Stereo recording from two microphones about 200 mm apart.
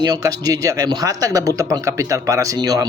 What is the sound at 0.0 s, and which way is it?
Speech, 20° right (ahead or behind).